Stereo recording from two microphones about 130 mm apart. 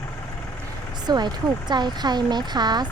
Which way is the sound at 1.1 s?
35° right (ahead or behind).